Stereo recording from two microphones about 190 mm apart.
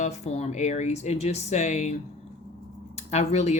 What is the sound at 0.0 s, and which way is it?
A woman's voice, 35° left (ahead or behind).